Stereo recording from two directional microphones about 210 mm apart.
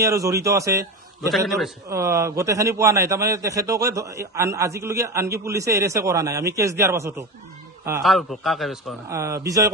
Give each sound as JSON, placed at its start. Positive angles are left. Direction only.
{"t": 0.0, "sound": "a man's voice", "side_deg": -15}
{"t": 1.3, "sound": "a man's voice", "side_deg": 0}
{"t": 2.0, "sound": "a man's voice", "side_deg": -15}
{"t": 8.0, "sound": "a man's voice", "side_deg": 0}
{"t": 9.1, "sound": "a man's voice", "side_deg": -15}